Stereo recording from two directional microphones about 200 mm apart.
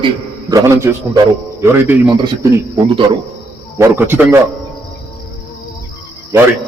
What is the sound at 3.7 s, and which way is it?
Speech, 10° right (ahead or behind).